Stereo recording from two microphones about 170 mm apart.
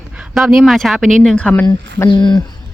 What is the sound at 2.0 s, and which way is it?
Speech, 25° left (ahead or behind).